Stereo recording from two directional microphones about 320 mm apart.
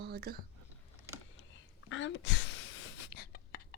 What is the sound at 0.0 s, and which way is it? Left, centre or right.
Whispering, right.